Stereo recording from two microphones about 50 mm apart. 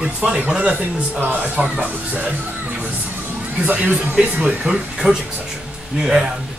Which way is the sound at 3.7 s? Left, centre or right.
Right.